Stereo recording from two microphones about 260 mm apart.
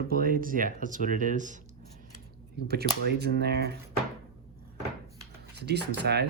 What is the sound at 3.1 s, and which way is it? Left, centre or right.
Speech, right.